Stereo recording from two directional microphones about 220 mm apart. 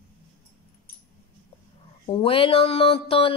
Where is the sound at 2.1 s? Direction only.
25° left (ahead or behind).